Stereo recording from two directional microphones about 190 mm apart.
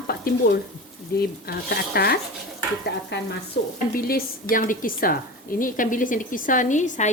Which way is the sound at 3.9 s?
50° left (ahead or behind).